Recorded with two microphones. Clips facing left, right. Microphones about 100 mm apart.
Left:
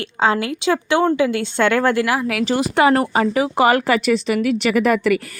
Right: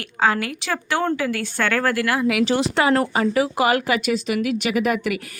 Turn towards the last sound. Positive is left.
turn(degrees=40)  # may be behind; listen again after turning